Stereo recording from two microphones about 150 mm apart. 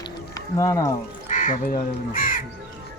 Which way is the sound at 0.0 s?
25° left (ahead or behind).